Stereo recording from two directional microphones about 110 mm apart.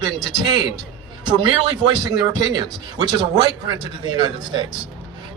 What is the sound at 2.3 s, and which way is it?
A man's voice, 40° right (ahead or behind).